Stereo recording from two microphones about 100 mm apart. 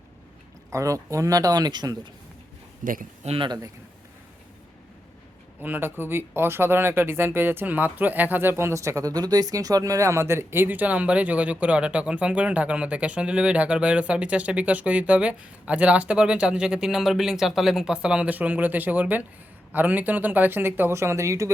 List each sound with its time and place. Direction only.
0.7 s speech: 30° right (ahead or behind)
3.2 s speech: 90° right
5.6 s speech: 20° right (ahead or behind)